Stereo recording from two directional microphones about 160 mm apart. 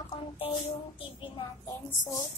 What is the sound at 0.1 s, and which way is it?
Speech, 35° left (ahead or behind).